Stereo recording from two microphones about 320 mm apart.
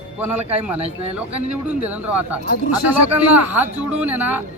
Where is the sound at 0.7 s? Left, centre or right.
Centre.